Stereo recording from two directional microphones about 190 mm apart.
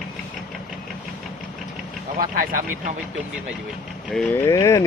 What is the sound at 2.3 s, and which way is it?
Speech, 45° right (ahead or behind).